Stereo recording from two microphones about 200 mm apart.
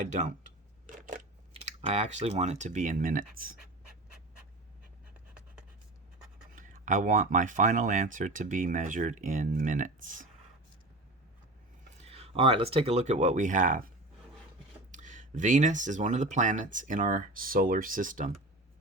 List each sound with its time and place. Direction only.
0.0 s speech: 40° right (ahead or behind)
6.5 s speech: 40° right (ahead or behind)
11.9 s speech: 30° right (ahead or behind)
14.9 s speech: 40° right (ahead or behind)